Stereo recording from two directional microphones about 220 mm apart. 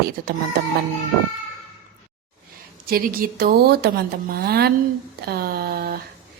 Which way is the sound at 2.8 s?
40° right (ahead or behind).